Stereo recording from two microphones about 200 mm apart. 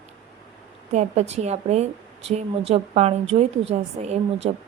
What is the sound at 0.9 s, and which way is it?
Speech, 35° right (ahead or behind).